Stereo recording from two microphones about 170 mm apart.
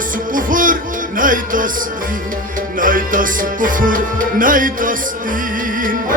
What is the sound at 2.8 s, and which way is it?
Music, 55° right (ahead or behind).